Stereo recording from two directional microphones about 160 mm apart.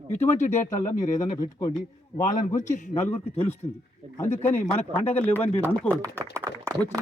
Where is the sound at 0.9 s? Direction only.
20° left (ahead or behind).